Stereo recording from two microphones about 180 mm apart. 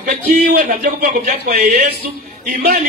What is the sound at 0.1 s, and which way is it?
Music, 50° right (ahead or behind).